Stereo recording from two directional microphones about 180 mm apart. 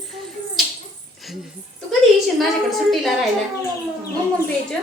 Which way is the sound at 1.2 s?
Centre (ahead or behind).